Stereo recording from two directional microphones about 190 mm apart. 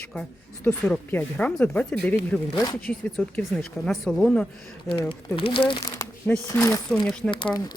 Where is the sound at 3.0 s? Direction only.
Centre (ahead or behind).